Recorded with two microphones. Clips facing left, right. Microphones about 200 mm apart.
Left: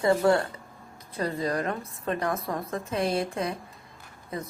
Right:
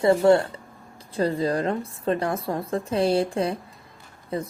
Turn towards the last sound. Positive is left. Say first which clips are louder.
# right 6 dB
turn(degrees=-30)  # may be behind; listen again after turning